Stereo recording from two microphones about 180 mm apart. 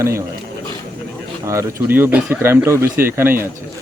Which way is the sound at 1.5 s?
15° right (ahead or behind).